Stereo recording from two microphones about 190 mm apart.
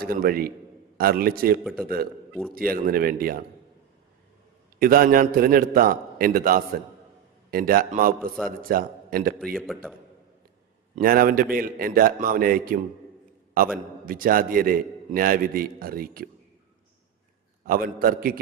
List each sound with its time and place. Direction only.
0.0 s a man's voice: 50° right (ahead or behind)
1.6 s a man's voice: centre (ahead or behind)
2.6 s a man's voice: 50° right (ahead or behind)
4.8 s a man's voice: 50° right (ahead or behind)
9.6 s a man's voice: centre (ahead or behind)
10.9 s a man's voice: 50° right (ahead or behind)
17.7 s a man's voice: 50° right (ahead or behind)